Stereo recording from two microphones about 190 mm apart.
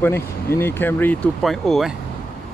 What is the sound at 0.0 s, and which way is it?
Speech, 10° left (ahead or behind).